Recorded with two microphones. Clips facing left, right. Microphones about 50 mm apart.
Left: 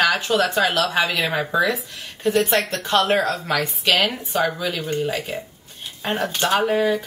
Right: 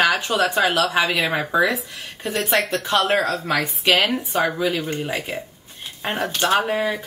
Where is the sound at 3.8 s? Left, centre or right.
Centre.